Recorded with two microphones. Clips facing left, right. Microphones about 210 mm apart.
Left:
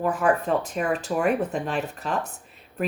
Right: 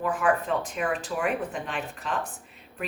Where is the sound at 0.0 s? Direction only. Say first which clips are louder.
Left 3 dB; 40° left (ahead or behind).